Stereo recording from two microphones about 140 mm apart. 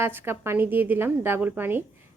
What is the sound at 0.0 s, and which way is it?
A woman's voice, 15° right (ahead or behind).